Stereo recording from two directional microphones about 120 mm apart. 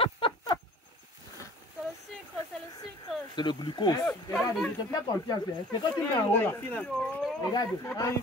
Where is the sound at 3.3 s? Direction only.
40° left (ahead or behind).